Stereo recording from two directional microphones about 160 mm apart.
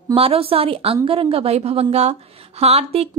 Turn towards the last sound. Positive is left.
turn(degrees=-40)  # may be behind; listen again after turning